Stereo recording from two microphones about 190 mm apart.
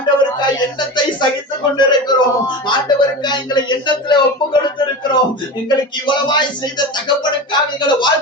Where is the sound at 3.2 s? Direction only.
25° left (ahead or behind).